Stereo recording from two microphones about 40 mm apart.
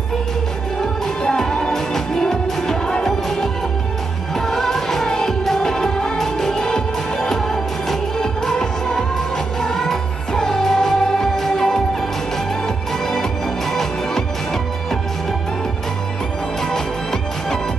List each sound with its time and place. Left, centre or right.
1.2 s music: centre
4.5 s music: centre
7.9 s music: centre
16.7 s music: centre